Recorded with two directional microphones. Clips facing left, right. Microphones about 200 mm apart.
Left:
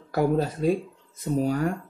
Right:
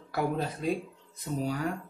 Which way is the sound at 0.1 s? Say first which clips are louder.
Left 7 dB; 40° left (ahead or behind).